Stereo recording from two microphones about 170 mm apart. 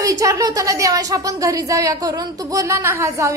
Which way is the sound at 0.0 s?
20° right (ahead or behind).